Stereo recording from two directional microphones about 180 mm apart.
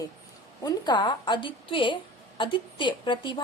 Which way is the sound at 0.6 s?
25° left (ahead or behind).